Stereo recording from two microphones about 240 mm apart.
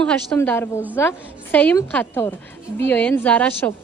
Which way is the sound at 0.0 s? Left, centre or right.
Centre.